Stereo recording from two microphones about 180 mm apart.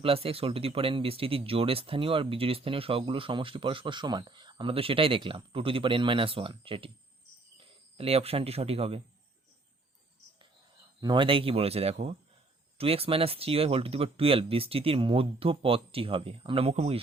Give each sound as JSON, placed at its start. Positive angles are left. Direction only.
{"t": 0.0, "sound": "speech", "side_deg": -30}
{"t": 11.0, "sound": "speech", "side_deg": -25}